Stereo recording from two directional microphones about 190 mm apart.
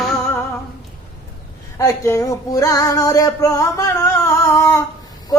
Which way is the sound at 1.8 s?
15° left (ahead or behind).